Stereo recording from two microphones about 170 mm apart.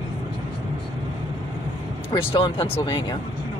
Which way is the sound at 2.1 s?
30° left (ahead or behind).